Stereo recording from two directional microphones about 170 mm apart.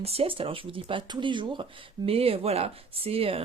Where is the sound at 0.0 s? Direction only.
35° right (ahead or behind).